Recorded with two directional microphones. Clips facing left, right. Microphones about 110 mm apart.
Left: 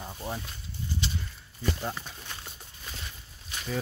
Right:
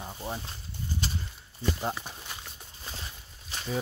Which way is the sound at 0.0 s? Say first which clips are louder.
Even; 5° right (ahead or behind).